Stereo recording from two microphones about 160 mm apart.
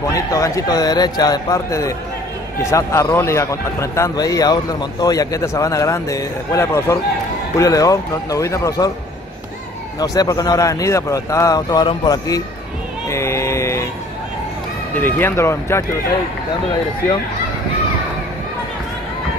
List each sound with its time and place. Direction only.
0.0 s a man's voice: 20° left (ahead or behind)
9.9 s a man's voice: 20° left (ahead or behind)
13.1 s a sound: 15° left (ahead or behind)
15.0 s speech: 10° left (ahead or behind)